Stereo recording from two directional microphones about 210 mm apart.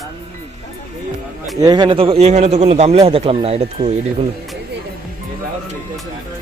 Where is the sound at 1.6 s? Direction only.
20° right (ahead or behind).